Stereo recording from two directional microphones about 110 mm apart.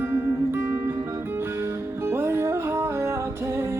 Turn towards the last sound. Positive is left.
turn(degrees=-20)  # may be behind; listen again after turning